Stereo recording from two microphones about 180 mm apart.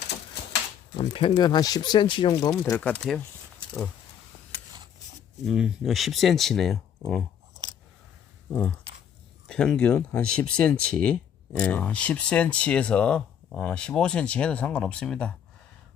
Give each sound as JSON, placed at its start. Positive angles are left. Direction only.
{"t": 0.9, "sound": "speech", "side_deg": 30}
{"t": 5.4, "sound": "speech", "side_deg": 0}
{"t": 9.5, "sound": "speech", "side_deg": 5}